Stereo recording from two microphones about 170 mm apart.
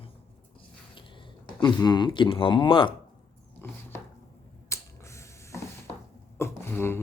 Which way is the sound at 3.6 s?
15° left (ahead or behind).